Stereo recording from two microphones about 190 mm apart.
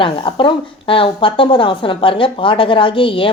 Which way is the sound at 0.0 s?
25° left (ahead or behind).